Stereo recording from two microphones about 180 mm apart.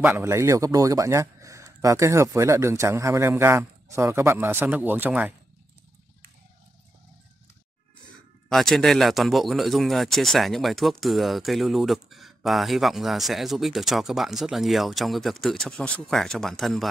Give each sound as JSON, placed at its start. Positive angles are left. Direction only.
{"t": 0.0, "sound": "a man's voice", "side_deg": -15}
{"t": 8.5, "sound": "speech", "side_deg": 0}